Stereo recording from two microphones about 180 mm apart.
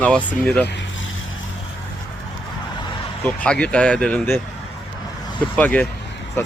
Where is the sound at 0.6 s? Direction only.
80° left.